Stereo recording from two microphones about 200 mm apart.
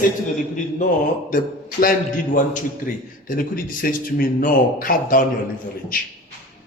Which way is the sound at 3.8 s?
45° left (ahead or behind).